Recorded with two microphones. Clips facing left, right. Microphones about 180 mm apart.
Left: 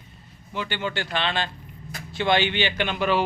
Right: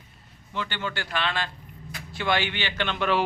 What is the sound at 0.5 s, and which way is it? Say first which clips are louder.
A man's voice: left 3 dB; 15° left (ahead or behind).